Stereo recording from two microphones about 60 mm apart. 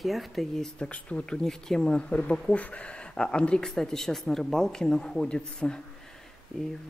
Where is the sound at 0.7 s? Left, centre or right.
Centre.